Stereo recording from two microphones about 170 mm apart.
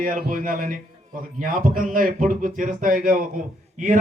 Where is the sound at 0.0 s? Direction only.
55° right (ahead or behind).